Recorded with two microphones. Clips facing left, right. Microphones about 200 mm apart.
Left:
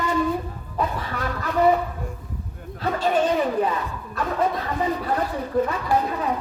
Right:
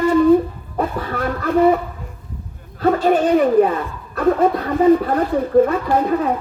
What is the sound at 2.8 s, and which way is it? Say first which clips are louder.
Speech: right 7 dB; 50° right (ahead or behind).